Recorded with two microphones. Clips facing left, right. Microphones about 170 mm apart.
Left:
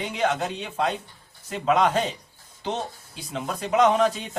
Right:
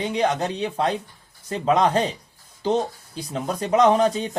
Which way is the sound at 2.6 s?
35° right (ahead or behind).